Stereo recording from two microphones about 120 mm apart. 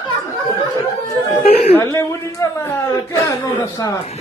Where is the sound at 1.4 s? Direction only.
55° left (ahead or behind).